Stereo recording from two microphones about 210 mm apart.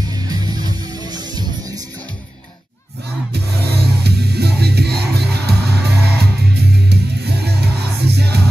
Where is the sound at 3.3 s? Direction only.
50° right (ahead or behind).